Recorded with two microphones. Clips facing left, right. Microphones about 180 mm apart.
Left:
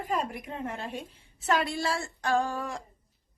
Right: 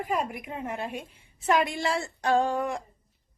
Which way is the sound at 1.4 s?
15° right (ahead or behind).